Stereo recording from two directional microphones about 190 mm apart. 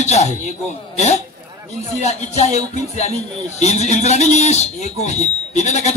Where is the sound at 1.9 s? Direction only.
35° left (ahead or behind).